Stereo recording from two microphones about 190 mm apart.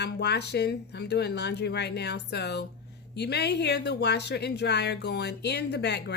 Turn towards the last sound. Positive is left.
turn(degrees=65)  # may be behind; listen again after turning